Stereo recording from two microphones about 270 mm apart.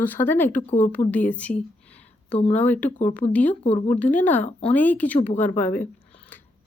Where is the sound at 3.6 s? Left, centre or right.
Left.